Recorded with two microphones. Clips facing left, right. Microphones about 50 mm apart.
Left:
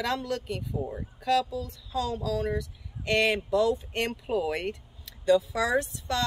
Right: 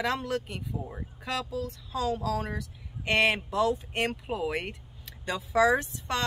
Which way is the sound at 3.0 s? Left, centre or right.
Centre.